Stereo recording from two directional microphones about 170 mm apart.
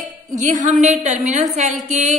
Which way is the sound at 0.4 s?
45° right (ahead or behind).